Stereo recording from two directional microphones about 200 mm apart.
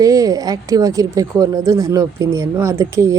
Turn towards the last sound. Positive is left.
turn(degrees=-15)  # may be behind; listen again after turning